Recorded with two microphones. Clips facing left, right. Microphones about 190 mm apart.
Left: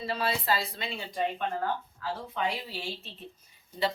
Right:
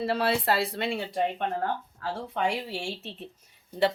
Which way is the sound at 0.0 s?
70° right (ahead or behind).